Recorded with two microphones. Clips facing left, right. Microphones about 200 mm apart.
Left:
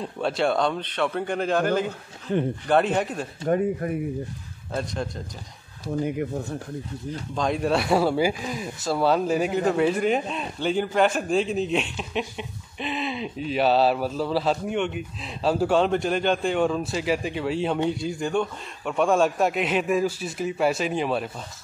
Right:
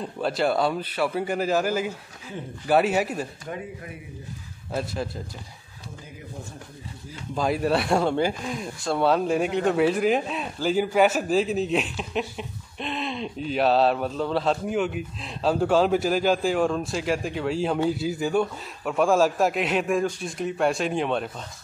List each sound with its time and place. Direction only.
0.0 s speech: centre (ahead or behind)
2.3 s speech: 75° left (ahead or behind)
2.6 s speech: 5° right (ahead or behind)
3.4 s speech: 50° left (ahead or behind)
4.7 s speech: 5° right (ahead or behind)
7.1 s speech: 5° right (ahead or behind)